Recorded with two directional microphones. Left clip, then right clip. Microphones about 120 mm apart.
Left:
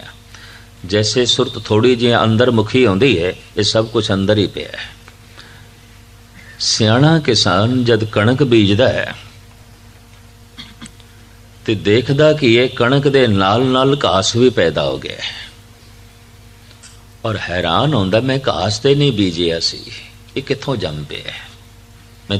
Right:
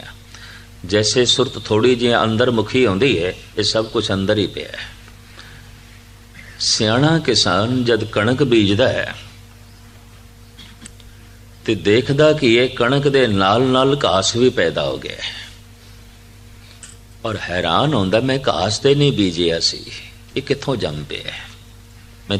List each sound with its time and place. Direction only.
0.0 s speech: 35° right (ahead or behind)
6.6 s speech: 30° right (ahead or behind)
11.6 s speech: 35° right (ahead or behind)
17.2 s a man's voice: 30° right (ahead or behind)